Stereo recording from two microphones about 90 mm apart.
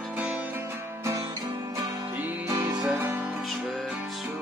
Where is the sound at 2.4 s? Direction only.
50° right (ahead or behind).